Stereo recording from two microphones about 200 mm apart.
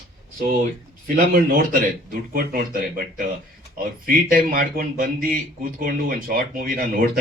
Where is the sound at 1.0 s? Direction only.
45° right (ahead or behind).